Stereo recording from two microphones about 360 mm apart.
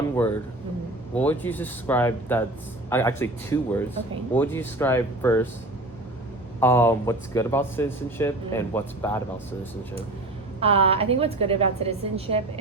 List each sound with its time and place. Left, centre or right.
1.1 s speech: centre
6.6 s speech: centre
10.6 s a woman's voice: centre